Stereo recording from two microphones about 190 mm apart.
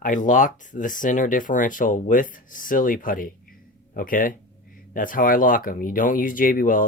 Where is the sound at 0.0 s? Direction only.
45° left (ahead or behind).